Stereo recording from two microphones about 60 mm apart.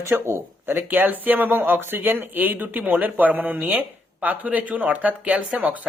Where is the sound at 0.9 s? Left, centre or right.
Right.